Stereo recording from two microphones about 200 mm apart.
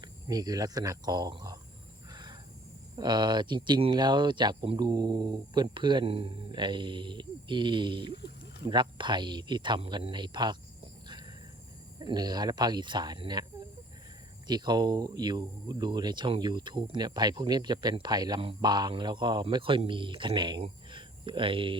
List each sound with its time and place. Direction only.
0.0 s speech: 20° right (ahead or behind)
2.9 s speech: 20° right (ahead or behind)
11.9 s speech: 20° right (ahead or behind)